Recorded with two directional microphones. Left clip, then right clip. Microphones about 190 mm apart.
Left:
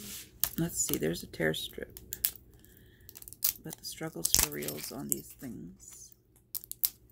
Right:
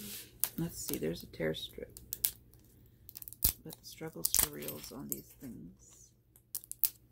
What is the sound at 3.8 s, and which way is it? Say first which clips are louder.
Shuffling cards: left 5 dB; 30° left (ahead or behind).